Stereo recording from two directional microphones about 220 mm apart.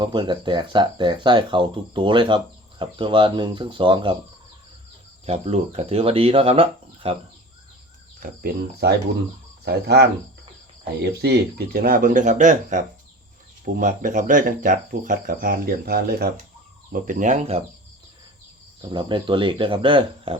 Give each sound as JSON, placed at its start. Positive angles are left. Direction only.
{"t": 0.0, "sound": "speech", "side_deg": -20}
{"t": 5.2, "sound": "speech", "side_deg": -30}
{"t": 8.2, "sound": "speech", "side_deg": -45}
{"t": 11.0, "sound": "cricket", "side_deg": -45}
{"t": 18.8, "sound": "speech", "side_deg": -20}